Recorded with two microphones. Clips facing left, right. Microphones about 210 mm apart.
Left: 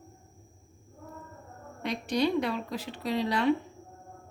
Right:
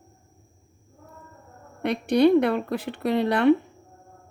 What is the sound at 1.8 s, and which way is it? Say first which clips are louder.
Speech: right 9 dB; 60° right (ahead or behind).